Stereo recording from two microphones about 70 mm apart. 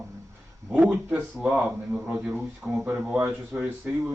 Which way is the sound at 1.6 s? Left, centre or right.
Centre.